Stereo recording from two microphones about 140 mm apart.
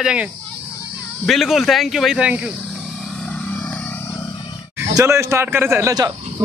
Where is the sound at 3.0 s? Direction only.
5° left (ahead or behind).